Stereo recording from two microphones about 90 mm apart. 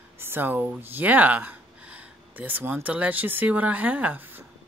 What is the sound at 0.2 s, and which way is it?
A woman's voice, 25° right (ahead or behind).